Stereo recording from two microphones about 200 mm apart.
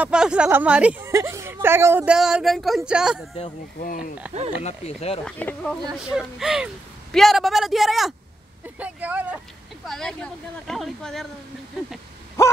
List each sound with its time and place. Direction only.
0.0 s speech: 5° right (ahead or behind)
3.8 s speech: 45° left (ahead or behind)
4.6 s speech: 30° left (ahead or behind)
5.2 s speech: 5° left (ahead or behind)